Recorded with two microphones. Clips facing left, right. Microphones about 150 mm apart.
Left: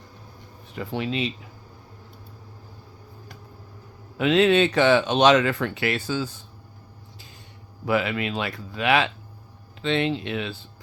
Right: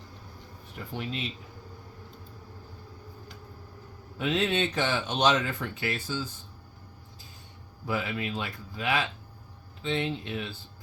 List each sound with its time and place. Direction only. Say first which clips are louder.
0.8 s speech: left 8 dB; 90° left
4.2 s speech: left 9 dB; 85° left
7.9 s speech: left 7 dB; 85° left